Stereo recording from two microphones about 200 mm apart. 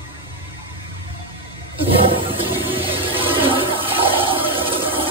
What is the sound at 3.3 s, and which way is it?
Toilet flush, 25° right (ahead or behind).